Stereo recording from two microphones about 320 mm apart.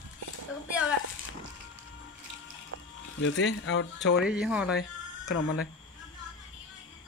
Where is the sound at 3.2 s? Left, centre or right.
Left.